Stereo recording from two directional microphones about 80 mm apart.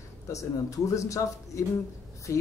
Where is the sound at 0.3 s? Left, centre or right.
Left.